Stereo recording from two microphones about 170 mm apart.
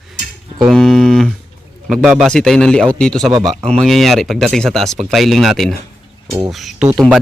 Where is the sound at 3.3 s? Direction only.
25° right (ahead or behind).